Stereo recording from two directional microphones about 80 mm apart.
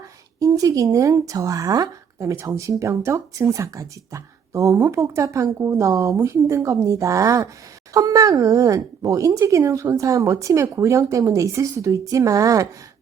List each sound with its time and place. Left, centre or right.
0.3 s speech: right